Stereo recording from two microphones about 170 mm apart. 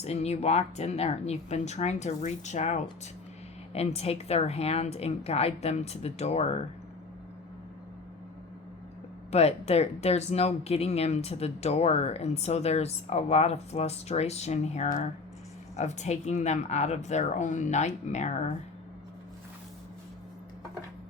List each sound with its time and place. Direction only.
0.0 s speech: 40° left (ahead or behind)
9.3 s speech: 40° left (ahead or behind)